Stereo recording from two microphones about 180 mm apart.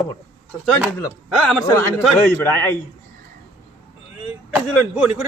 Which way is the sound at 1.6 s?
15° left (ahead or behind).